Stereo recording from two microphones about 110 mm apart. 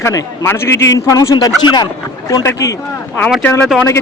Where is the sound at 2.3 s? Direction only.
30° left (ahead or behind).